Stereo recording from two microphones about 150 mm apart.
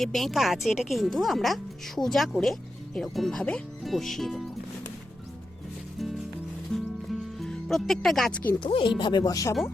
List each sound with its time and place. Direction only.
0.0 s a woman's voice: centre (ahead or behind)
6.7 s music: centre (ahead or behind)
8.6 s speech: 35° left (ahead or behind)